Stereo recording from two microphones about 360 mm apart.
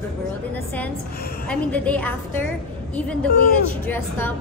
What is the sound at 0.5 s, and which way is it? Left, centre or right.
A woman's voice, centre.